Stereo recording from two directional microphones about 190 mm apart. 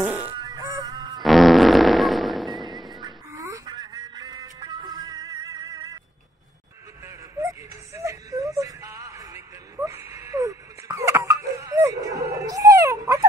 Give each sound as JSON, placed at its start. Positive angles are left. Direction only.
{"t": 0.0, "sound": "music", "side_deg": -10}
{"t": 0.4, "sound": "music", "side_deg": -20}
{"t": 1.2, "sound": "fart", "side_deg": 0}
{"t": 3.0, "sound": "music", "side_deg": -20}
{"t": 7.1, "sound": "music", "side_deg": -15}